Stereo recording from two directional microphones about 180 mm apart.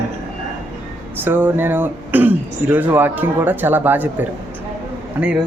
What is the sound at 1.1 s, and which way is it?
Speech, 10° right (ahead or behind).